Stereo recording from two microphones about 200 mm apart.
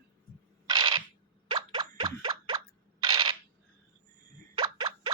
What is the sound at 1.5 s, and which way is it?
Plop, 25° right (ahead or behind).